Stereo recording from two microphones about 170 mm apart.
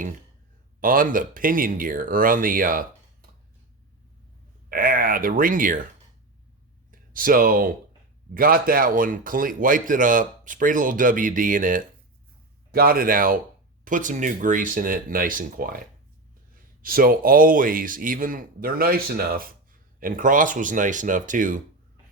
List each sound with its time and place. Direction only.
0.8 s speech: 55° right (ahead or behind)
4.7 s speech: 55° right (ahead or behind)
6.9 s speech: 55° right (ahead or behind)
16.8 s speech: 60° right (ahead or behind)